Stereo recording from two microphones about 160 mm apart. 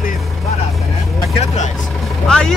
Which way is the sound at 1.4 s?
50° left (ahead or behind).